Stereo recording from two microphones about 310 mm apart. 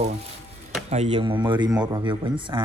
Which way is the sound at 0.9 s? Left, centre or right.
Right.